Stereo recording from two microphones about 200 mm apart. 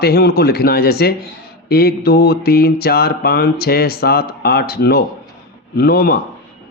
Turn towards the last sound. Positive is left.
turn(degrees=50)  # may be behind; listen again after turning